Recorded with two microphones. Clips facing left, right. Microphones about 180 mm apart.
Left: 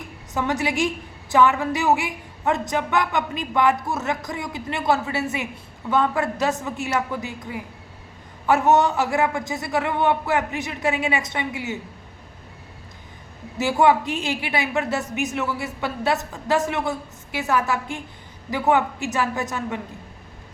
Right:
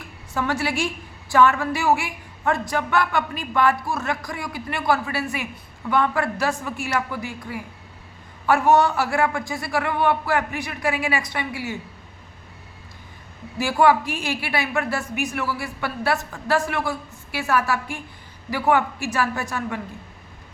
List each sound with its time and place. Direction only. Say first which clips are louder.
0.3 s a woman's voice: left 1 dB; 20° left (ahead or behind)
13.6 s a woman's voice: even; 20° left (ahead or behind)